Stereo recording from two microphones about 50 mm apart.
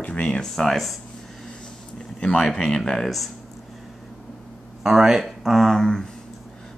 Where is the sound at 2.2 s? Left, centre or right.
Centre.